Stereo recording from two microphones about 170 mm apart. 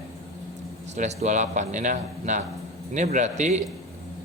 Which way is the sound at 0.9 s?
45° right (ahead or behind).